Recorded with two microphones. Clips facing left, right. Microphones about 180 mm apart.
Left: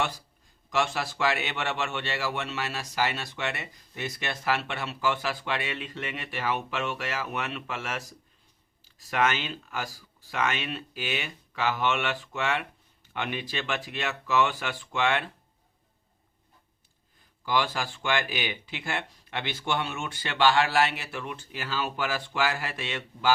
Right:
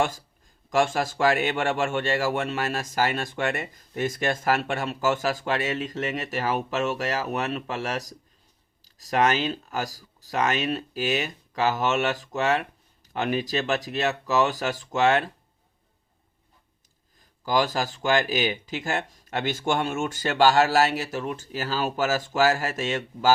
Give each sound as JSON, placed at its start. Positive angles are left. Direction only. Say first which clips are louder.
{"t": 0.7, "sound": "a man's voice", "louder": "right 5 dB", "side_deg": -45}
{"t": 17.4, "sound": "speech", "louder": "right 4 dB", "side_deg": -40}